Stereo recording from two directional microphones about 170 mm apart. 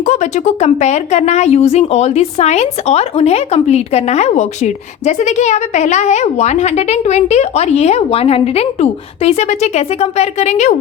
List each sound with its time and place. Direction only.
0.0 s a woman's voice: 45° left (ahead or behind)